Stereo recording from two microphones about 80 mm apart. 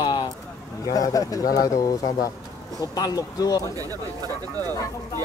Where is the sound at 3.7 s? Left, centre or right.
Right.